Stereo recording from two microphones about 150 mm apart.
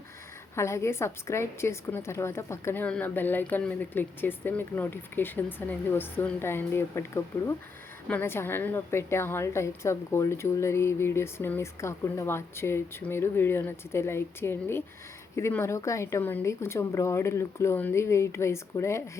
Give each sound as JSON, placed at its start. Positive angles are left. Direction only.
{"t": 0.5, "sound": "a woman's voice", "side_deg": 20}